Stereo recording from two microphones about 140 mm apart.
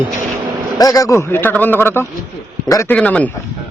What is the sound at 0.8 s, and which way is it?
A man's voice, 25° left (ahead or behind).